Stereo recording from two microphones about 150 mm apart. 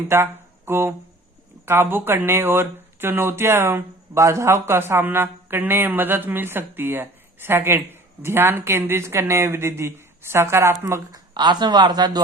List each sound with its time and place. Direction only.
0.1 s speech: 15° right (ahead or behind)
11.3 s speech: 30° right (ahead or behind)